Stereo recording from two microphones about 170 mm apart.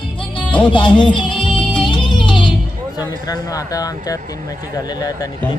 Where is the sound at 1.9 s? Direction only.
30° left (ahead or behind).